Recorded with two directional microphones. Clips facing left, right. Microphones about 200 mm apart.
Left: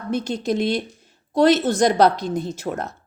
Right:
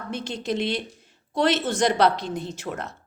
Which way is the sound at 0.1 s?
40° left (ahead or behind).